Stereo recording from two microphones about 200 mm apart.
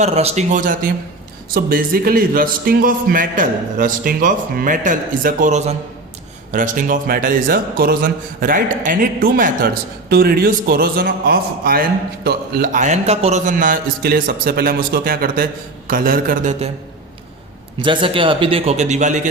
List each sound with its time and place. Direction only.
0.0 s a man's voice: 35° right (ahead or behind)
17.7 s a man's voice: 25° right (ahead or behind)